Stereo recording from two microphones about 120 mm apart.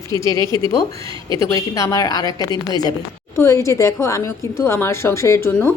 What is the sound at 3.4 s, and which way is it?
A woman's voice, 25° left (ahead or behind).